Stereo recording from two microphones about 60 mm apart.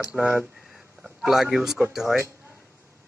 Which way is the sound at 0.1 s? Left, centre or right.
Right.